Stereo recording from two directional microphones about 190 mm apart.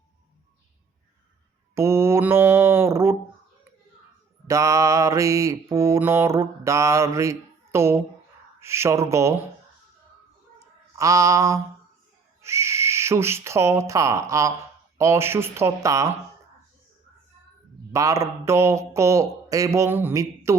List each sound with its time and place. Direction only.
1.7 s mantra: 15° right (ahead or behind)
4.4 s mantra: 15° right (ahead or behind)
8.6 s speech: 15° right (ahead or behind)
10.9 s speech: 15° right (ahead or behind)
17.9 s speech: 15° right (ahead or behind)